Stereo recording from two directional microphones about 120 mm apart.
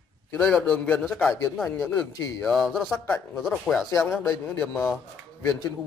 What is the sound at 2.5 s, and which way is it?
Speech, centre (ahead or behind).